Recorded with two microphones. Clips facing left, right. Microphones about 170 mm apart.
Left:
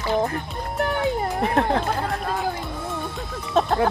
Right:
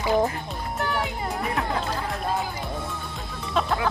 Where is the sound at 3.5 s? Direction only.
45° left (ahead or behind).